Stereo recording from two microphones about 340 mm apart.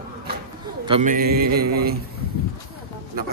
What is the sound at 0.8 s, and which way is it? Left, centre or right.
Speech, centre.